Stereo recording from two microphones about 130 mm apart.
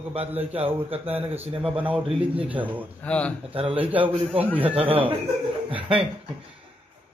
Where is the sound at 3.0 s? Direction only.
10° left (ahead or behind).